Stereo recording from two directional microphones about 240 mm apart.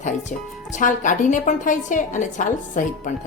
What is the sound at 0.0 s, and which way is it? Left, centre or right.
A woman's voice, left.